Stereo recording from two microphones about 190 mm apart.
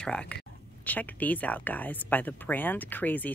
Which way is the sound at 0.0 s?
5° left (ahead or behind).